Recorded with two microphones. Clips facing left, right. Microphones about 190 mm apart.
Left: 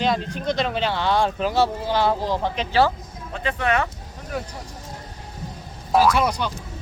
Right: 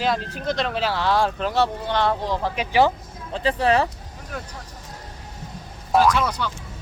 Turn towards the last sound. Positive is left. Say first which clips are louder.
# left 1 dB
turn(degrees=15)  # may be behind; listen again after turning